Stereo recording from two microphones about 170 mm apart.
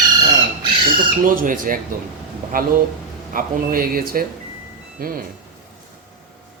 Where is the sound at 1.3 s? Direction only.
55° right (ahead or behind).